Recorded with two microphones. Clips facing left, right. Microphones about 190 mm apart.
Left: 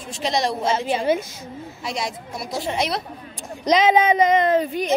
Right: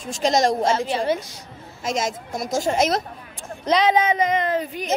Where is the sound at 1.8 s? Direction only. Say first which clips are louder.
Right 4 dB; 45° right (ahead or behind).